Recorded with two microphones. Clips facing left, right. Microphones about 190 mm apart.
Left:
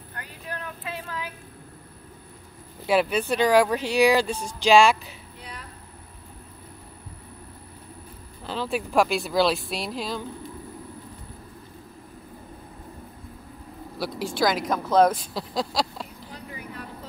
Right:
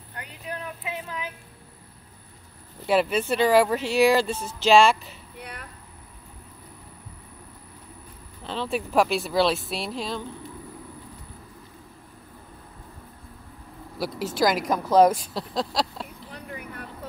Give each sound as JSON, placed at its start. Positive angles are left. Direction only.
{"t": 0.1, "sound": "vehicle", "side_deg": -15}
{"t": 2.9, "sound": "speech", "side_deg": 0}
{"t": 5.4, "sound": "a sound", "side_deg": -60}
{"t": 8.5, "sound": "speech", "side_deg": 0}
{"t": 13.9, "sound": "speech", "side_deg": -5}
{"t": 15.3, "sound": "speech", "side_deg": 0}